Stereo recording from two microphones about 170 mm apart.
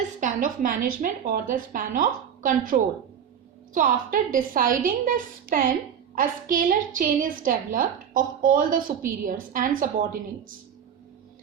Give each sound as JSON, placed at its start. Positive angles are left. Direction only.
{"t": 0.2, "sound": "a woman's voice", "side_deg": -50}